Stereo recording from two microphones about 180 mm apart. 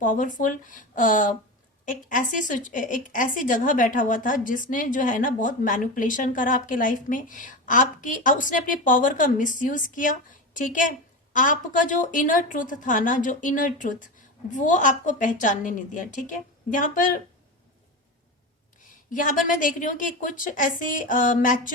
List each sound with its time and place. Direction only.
0.0 s a woman's voice: 45° left (ahead or behind)
19.1 s a woman's voice: 45° left (ahead or behind)